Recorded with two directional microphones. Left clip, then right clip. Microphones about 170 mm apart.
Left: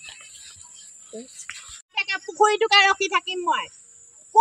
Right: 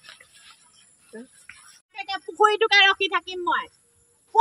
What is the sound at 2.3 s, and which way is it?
Speech, 30° right (ahead or behind).